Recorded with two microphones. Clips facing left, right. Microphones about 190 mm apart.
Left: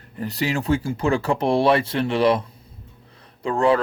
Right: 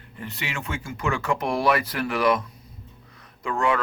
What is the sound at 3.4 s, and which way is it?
Speech, 30° left (ahead or behind).